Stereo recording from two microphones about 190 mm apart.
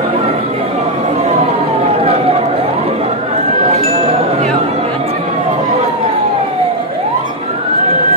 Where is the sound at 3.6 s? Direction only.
30° right (ahead or behind).